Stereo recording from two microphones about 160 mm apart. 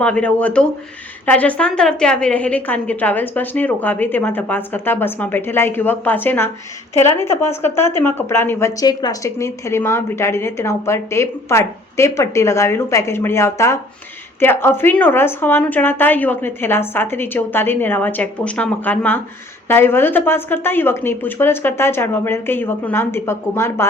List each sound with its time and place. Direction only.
0.0 s a woman's voice: 5° left (ahead or behind)